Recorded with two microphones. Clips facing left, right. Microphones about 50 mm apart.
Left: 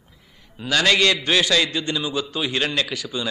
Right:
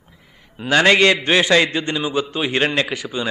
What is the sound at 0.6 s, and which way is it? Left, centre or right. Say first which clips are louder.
A man's voice: right 5 dB; right.